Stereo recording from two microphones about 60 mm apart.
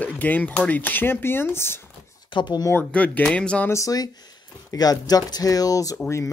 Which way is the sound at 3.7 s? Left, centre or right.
Left.